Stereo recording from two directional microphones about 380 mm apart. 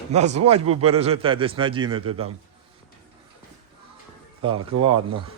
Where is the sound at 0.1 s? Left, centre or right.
Centre.